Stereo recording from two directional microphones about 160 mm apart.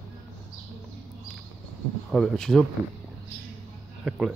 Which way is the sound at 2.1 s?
Centre (ahead or behind).